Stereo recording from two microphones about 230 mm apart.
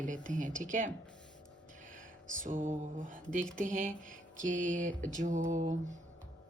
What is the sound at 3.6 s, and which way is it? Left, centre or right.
A woman's voice, right.